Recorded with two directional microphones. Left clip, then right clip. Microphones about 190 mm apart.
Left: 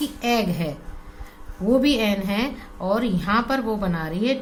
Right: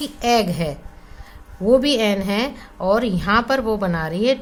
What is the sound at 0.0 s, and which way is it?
Speech, 35° right (ahead or behind).